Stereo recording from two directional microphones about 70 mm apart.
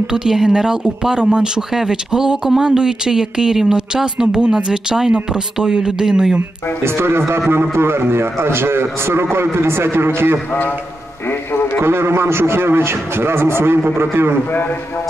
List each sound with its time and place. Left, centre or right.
0.0 s speech: centre
6.8 s a man's voice: right
11.8 s a man's voice: right
14.5 s a man's voice: left